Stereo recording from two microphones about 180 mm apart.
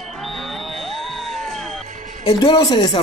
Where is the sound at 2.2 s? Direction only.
30° left (ahead or behind).